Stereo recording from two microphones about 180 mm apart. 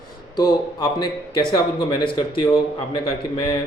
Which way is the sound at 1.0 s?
25° left (ahead or behind).